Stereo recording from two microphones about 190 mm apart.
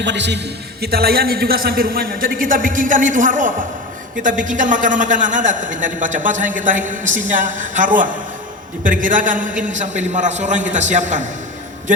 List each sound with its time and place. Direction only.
0.0 s a woman's voice: 65° right (ahead or behind); by 11.3 s 40° right (ahead or behind)